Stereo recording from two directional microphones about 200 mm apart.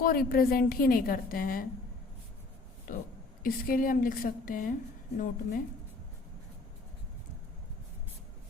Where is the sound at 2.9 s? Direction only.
45° left (ahead or behind).